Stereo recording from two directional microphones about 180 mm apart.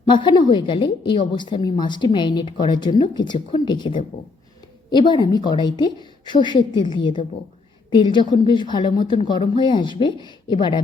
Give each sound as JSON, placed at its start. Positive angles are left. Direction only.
{"t": 0.1, "sound": "a woman's voice", "side_deg": 25}